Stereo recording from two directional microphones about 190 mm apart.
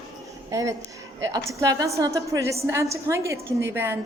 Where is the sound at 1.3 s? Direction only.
15° right (ahead or behind).